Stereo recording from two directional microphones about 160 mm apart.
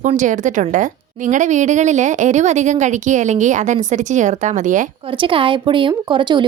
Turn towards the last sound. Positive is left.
turn(degrees=-30)  # may be behind; listen again after turning